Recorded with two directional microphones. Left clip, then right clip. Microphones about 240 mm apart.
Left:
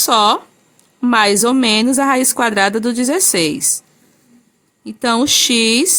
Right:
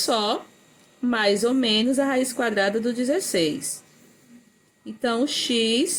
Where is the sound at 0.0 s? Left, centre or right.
Left.